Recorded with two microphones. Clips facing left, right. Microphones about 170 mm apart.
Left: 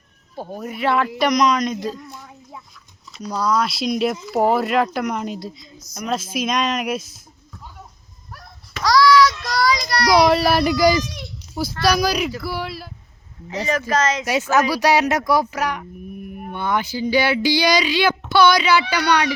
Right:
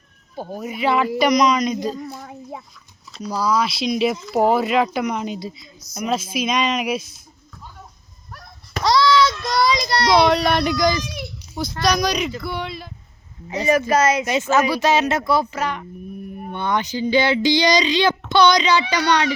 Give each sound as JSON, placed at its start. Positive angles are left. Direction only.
{"t": 0.3, "sound": "speech", "side_deg": 0}
{"t": 2.1, "sound": "a sound", "side_deg": -55}
{"t": 3.2, "sound": "speech", "side_deg": -5}
{"t": 8.8, "sound": "child singing", "side_deg": -25}
{"t": 10.2, "sound": "speech", "side_deg": 5}
{"t": 13.5, "sound": "speech", "side_deg": -15}
{"t": 14.7, "sound": "speech", "side_deg": 15}